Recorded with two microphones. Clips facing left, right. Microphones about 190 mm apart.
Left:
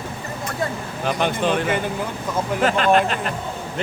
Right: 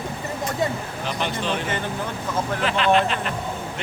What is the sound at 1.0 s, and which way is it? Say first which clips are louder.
Speech: left 6 dB; 50° left (ahead or behind).